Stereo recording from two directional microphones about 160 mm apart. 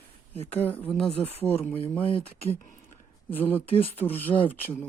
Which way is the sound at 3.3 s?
10° left (ahead or behind).